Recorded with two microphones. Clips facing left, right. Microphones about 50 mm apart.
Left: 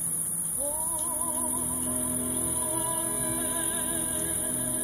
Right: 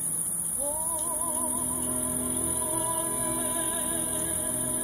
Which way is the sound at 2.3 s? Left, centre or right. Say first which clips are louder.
Right 1 dB; centre.